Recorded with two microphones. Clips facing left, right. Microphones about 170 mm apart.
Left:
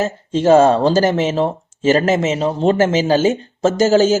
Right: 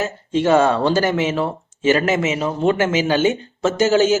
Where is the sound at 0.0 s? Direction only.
35° left (ahead or behind).